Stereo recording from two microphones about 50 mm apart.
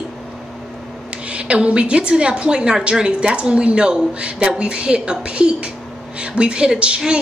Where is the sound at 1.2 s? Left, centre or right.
Right.